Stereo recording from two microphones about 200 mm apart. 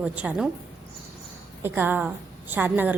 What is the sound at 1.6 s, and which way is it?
A woman's voice, 10° right (ahead or behind).